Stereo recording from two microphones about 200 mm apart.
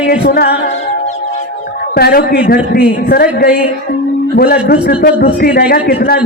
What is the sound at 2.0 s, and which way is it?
Speech, 50° left (ahead or behind).